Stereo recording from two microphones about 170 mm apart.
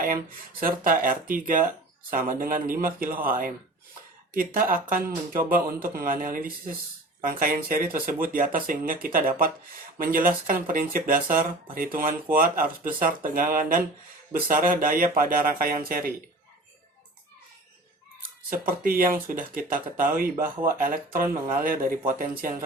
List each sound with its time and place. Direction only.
0.6 s speech: 55° right (ahead or behind)
18.2 s speech: 55° right (ahead or behind)